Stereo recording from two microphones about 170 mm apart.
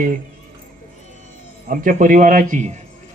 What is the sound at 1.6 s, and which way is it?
Speech, 55° right (ahead or behind).